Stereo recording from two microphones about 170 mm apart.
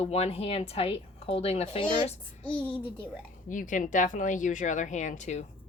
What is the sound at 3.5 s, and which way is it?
Speech, 50° left (ahead or behind).